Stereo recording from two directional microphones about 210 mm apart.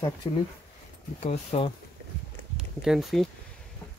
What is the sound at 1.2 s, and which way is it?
Speech, 30° left (ahead or behind).